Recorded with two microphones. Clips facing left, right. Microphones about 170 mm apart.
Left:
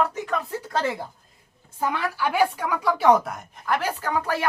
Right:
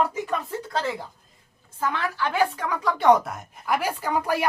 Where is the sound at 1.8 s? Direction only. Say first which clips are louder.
Left 1 dB; 10° left (ahead or behind).